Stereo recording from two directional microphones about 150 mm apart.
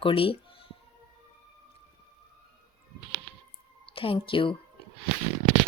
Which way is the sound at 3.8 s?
35° left (ahead or behind).